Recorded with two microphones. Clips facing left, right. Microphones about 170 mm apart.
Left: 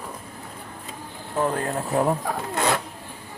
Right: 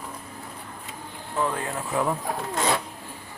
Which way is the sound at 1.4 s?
40° left (ahead or behind).